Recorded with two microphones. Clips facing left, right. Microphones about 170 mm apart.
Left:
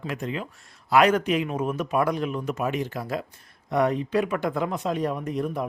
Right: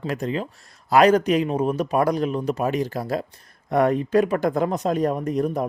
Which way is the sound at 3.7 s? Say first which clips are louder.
Right 4 dB; 50° right (ahead or behind).